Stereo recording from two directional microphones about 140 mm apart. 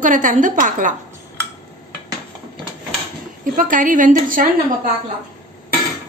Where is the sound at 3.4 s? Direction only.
75° right (ahead or behind).